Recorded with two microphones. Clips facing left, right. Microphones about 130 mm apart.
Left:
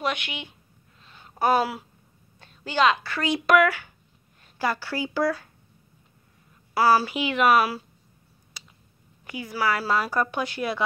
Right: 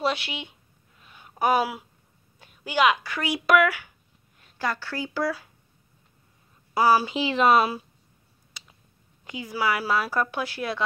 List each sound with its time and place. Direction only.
0.0 s speech: 30° right (ahead or behind)
1.0 s a sound: 10° right (ahead or behind)
1.4 s a woman's voice: 10° right (ahead or behind)
4.6 s a woman's voice: 5° left (ahead or behind)
6.7 s a woman's voice: 15° right (ahead or behind)
7.2 s speech: 30° right (ahead or behind)
8.6 s a sound: centre (ahead or behind)
9.2 s a woman's voice: 20° right (ahead or behind)
9.9 s speech: 5° right (ahead or behind)